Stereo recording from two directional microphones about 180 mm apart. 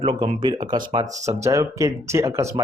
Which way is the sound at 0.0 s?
30° right (ahead or behind).